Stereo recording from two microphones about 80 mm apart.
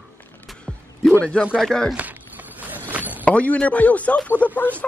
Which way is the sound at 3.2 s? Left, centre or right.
Centre.